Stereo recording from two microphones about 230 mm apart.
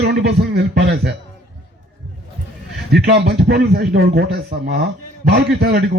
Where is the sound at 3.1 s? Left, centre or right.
Right.